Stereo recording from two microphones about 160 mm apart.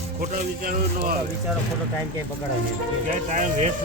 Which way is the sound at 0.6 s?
65° right (ahead or behind).